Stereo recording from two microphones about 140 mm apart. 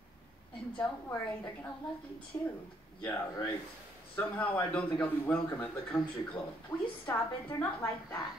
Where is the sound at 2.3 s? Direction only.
20° left (ahead or behind).